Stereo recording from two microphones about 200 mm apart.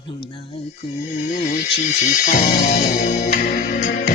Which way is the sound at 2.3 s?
45° left (ahead or behind).